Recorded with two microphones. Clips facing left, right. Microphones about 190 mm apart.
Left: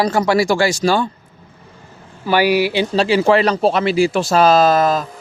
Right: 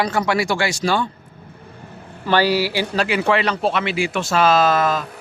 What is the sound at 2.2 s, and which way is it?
A man's voice, 10° left (ahead or behind).